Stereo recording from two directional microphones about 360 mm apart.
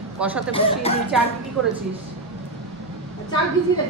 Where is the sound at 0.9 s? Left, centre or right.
Centre.